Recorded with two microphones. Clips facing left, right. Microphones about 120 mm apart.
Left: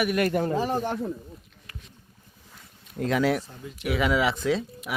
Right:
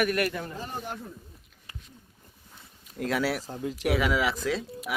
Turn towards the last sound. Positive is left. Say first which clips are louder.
# left 4 dB
turn(degrees=0)  # may be behind; listen again after turning